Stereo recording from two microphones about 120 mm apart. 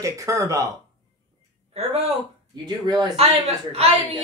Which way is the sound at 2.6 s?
35° right (ahead or behind).